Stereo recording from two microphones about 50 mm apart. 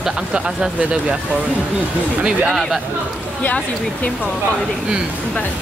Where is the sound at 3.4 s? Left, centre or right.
Left.